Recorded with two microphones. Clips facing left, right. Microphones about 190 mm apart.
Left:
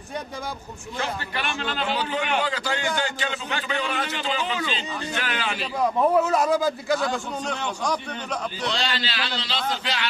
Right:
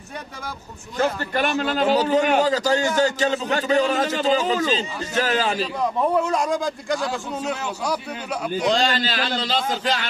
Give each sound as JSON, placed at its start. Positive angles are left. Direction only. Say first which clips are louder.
{"t": 0.9, "sound": "a man's voice", "louder": "right 8 dB", "side_deg": -45}
{"t": 5.8, "sound": "a man's voice", "louder": "left 3 dB", "side_deg": 5}
{"t": 8.5, "sound": "a man's voice", "louder": "right 10 dB", "side_deg": -45}